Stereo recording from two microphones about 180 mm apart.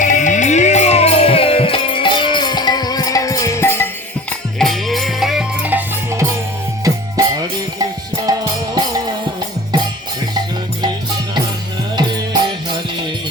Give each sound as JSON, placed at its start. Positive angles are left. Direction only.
{"t": 0.0, "sound": "music", "side_deg": 45}
{"t": 4.3, "sound": "music", "side_deg": 0}
{"t": 11.9, "sound": "music", "side_deg": -25}